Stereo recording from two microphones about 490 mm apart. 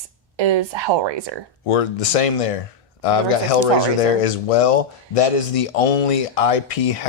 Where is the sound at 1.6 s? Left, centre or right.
Left.